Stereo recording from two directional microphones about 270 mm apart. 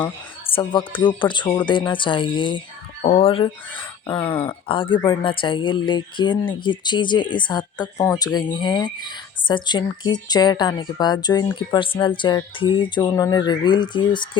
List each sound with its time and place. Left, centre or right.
0.5 s speech: centre